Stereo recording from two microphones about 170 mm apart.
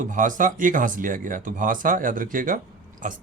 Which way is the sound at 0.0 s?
50° right (ahead or behind).